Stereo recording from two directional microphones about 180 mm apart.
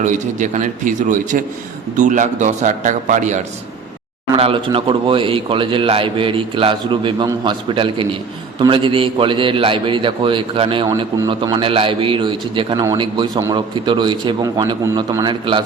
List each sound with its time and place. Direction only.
0.0 s a man's voice: 45° right (ahead or behind)
4.4 s a man's voice: 30° right (ahead or behind)